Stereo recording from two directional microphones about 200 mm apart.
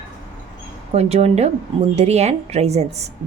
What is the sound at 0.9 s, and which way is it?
A woman's voice, 30° right (ahead or behind).